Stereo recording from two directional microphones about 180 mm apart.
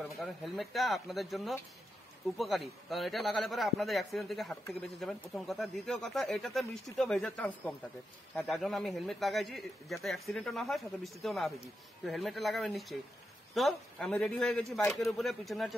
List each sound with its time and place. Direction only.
0.0 s speech: centre (ahead or behind)
14.8 s speech: 15° left (ahead or behind)
15.0 s speech: centre (ahead or behind)